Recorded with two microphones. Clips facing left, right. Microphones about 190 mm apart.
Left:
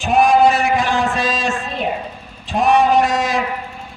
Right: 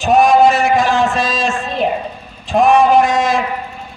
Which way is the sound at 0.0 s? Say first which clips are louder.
Right 3 dB; 40° right (ahead or behind).